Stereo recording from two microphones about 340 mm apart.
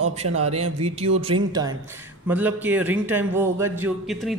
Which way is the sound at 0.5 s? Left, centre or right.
Centre.